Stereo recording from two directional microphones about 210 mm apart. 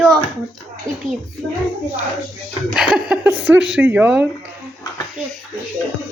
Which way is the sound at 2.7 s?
5° right (ahead or behind).